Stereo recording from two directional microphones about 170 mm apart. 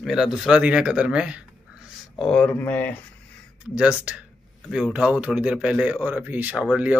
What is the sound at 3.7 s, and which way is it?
Speech, 5° right (ahead or behind).